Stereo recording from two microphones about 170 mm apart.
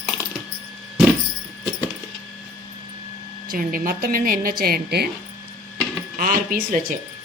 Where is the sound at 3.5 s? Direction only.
55° right (ahead or behind).